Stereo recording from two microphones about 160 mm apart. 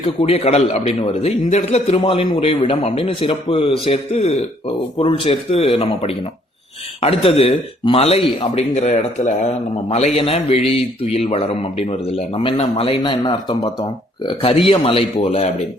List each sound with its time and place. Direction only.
0.0 s a man's voice: 40° left (ahead or behind)
14.3 s a man's voice: 35° left (ahead or behind)